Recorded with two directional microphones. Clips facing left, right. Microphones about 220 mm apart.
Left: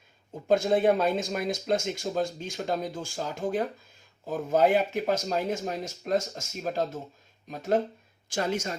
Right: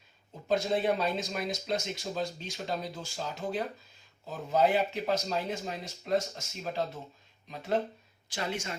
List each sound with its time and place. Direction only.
0.4 s speech: 50° left (ahead or behind)